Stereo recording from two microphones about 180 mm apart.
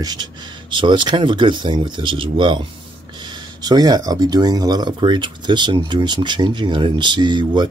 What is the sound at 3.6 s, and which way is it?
Speech, 20° right (ahead or behind).